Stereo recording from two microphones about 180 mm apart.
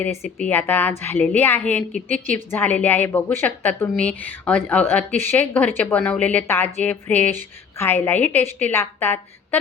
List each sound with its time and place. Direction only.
0.3 s a woman's voice: 10° left (ahead or behind)
2.0 s a woman's voice: 45° right (ahead or behind)
2.5 s a woman's voice: 10° left (ahead or behind)